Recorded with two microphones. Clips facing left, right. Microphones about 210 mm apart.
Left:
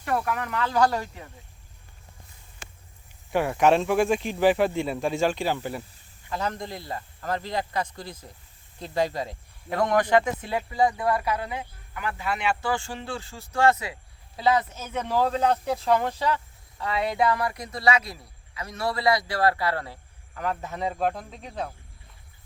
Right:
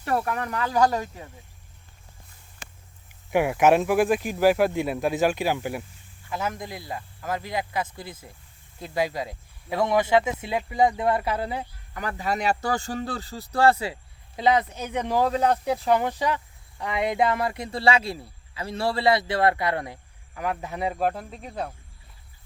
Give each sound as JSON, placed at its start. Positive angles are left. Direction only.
{"t": 0.0, "sound": "speech", "side_deg": -30}
{"t": 0.6, "sound": "speech", "side_deg": -15}
{"t": 3.3, "sound": "speech", "side_deg": -10}